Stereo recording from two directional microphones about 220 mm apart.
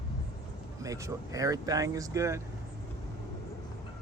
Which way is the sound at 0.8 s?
15° right (ahead or behind).